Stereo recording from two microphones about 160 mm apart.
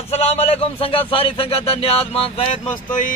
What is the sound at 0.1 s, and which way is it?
Speech, 40° left (ahead or behind).